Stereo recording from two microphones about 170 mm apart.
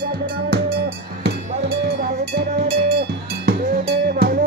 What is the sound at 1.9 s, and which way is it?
Cowbell, 70° right (ahead or behind).